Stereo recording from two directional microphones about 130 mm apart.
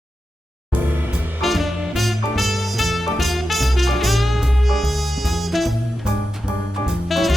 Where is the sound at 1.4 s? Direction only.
Centre (ahead or behind).